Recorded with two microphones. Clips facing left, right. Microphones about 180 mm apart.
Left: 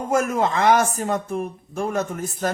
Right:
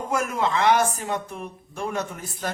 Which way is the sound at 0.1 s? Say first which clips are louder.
Left 4 dB; 45° left (ahead or behind).